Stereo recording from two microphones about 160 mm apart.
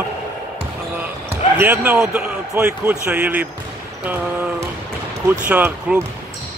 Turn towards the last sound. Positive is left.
turn(degrees=-10)  # may be behind; listen again after turning